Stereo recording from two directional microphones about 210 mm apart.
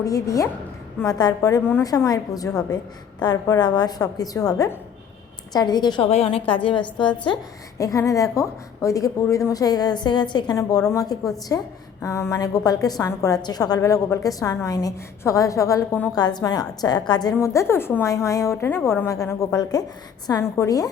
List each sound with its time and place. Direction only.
0.0 s a woman's voice: 15° left (ahead or behind)